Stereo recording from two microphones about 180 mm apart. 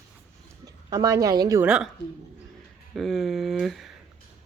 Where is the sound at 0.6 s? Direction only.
20° right (ahead or behind).